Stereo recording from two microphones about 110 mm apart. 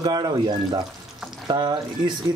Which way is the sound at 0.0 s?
35° right (ahead or behind).